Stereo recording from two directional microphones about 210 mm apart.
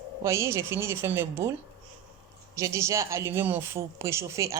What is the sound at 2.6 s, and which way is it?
Speech, 15° right (ahead or behind).